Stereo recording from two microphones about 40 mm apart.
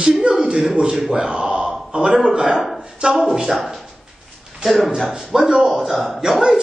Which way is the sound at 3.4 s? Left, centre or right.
Centre.